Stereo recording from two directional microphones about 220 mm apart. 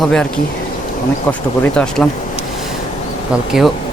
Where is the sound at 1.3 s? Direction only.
5° left (ahead or behind).